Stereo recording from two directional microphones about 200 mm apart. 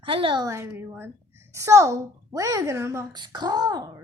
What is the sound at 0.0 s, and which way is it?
A woman's voice, 25° right (ahead or behind).